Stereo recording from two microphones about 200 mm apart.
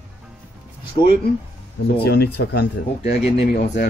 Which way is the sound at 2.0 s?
55° left (ahead or behind).